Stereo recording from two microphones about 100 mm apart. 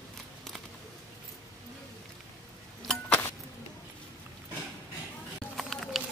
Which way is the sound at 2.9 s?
15° left (ahead or behind).